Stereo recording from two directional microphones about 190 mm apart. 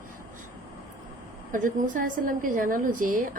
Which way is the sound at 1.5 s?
45° right (ahead or behind).